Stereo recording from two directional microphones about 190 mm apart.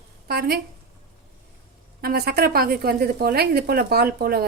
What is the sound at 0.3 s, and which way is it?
Speech, 55° right (ahead or behind).